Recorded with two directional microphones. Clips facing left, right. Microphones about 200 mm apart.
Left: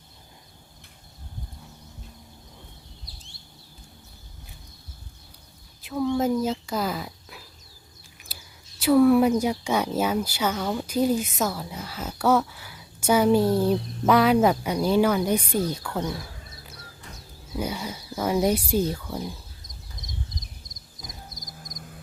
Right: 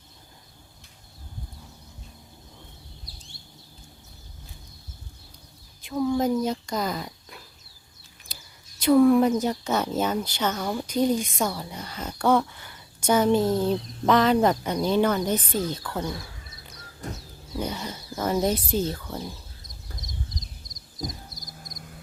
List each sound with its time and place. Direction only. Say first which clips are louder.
5.8 s speech: even; centre (ahead or behind)
10.6 s speech: left 1 dB; 10° right (ahead or behind)
10.8 s speech: even; 5° left (ahead or behind)
17.0 s a sound: right 12 dB; 45° right (ahead or behind)
17.6 s speech: left 1 dB; 10° left (ahead or behind)
21.4 s frog: left 1 dB; 20° left (ahead or behind)